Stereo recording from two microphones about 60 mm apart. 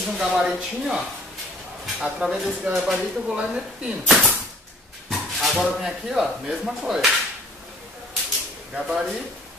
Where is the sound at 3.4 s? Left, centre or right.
Centre.